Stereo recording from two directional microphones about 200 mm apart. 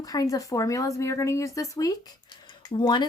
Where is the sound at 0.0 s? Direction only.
20° left (ahead or behind).